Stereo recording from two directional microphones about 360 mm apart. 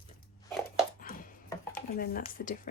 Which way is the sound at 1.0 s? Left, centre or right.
Left.